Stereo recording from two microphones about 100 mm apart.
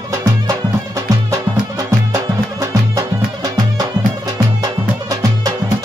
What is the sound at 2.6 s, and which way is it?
Music, 35° right (ahead or behind).